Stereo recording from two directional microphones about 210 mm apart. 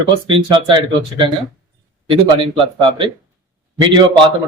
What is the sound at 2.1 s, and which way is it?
Speech, 25° right (ahead or behind).